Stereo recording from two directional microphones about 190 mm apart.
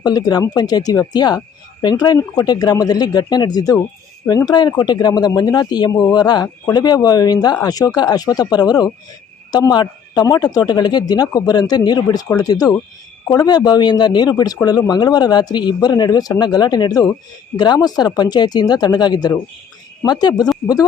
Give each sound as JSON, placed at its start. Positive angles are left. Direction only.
{"t": 0.0, "sound": "speech", "side_deg": 20}